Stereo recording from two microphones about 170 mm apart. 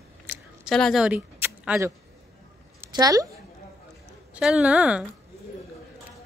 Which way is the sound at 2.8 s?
20° right (ahead or behind).